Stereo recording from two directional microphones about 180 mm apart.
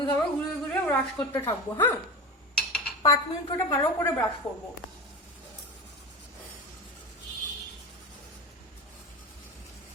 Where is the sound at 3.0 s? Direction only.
20° left (ahead or behind).